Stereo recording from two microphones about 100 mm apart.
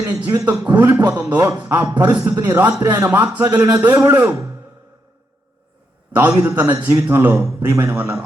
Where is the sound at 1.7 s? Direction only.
30° right (ahead or behind).